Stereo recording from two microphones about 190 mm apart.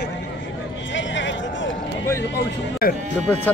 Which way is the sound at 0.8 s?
75° left (ahead or behind).